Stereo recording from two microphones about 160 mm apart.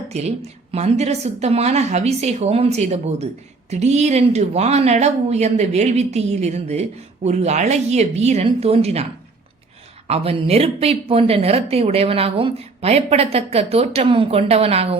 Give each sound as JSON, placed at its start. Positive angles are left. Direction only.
{"t": 0.1, "sound": "a woman's voice", "side_deg": -40}
{"t": 10.1, "sound": "a woman's voice", "side_deg": -40}